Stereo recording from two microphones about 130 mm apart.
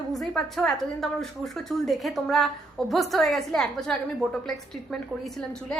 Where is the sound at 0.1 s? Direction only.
Centre (ahead or behind).